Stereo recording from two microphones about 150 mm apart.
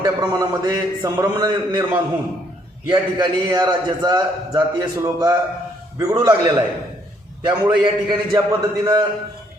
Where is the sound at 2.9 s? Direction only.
30° right (ahead or behind).